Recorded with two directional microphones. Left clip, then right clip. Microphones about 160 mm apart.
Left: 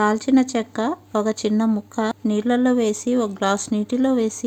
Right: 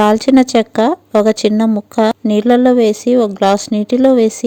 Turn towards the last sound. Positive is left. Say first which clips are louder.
# right 10 dB
turn(degrees=-35)  # may be behind; listen again after turning